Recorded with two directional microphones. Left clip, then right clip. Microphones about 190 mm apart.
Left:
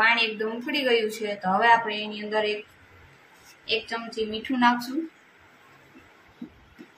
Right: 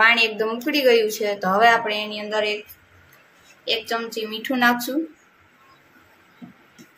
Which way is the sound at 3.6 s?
55° right (ahead or behind).